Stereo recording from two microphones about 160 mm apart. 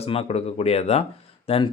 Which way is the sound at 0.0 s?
40° left (ahead or behind).